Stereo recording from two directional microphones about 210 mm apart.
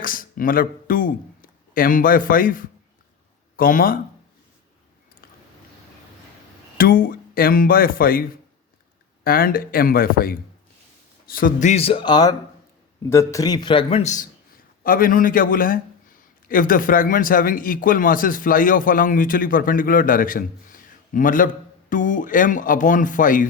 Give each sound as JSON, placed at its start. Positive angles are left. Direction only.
{"t": 0.0, "sound": "a man's voice", "side_deg": 40}
{"t": 6.7, "sound": "speech", "side_deg": 45}
{"t": 9.2, "sound": "a man's voice", "side_deg": 45}